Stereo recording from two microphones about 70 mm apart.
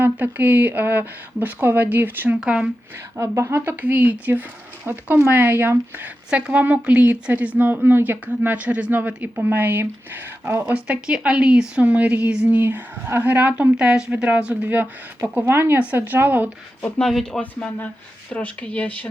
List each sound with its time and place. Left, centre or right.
0.0 s a woman's voice: right
2.4 s a woman's voice: centre
3.2 s a woman's voice: right; by 12.5 s centre
12.5 s a woman's voice: right
13.7 s a woman's voice: centre
17.0 s speech: centre
18.3 s speech: centre